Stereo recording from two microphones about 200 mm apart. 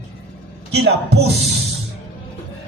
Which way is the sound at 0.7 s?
60° right (ahead or behind).